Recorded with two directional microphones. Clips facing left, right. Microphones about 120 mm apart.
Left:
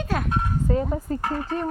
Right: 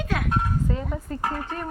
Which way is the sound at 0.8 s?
25° left (ahead or behind).